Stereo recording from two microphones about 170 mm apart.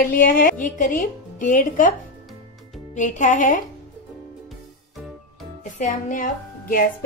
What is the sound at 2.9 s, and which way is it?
Music, 45° left (ahead or behind).